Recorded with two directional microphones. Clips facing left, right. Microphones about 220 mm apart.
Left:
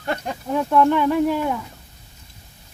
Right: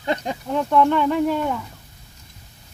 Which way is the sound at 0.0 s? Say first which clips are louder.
Right 2 dB; 15° right (ahead or behind).